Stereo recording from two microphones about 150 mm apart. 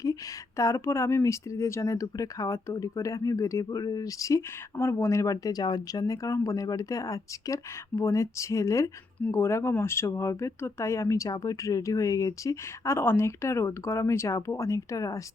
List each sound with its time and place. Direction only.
0.0 s speech: 20° left (ahead or behind)